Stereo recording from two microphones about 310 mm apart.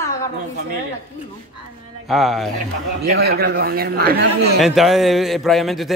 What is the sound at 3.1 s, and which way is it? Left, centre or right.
Speech, right.